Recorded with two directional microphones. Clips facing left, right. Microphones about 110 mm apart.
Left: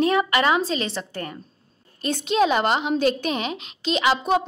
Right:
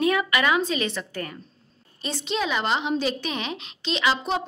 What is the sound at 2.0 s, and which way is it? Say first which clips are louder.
A woman's voice: left 7 dB; 50° left (ahead or behind).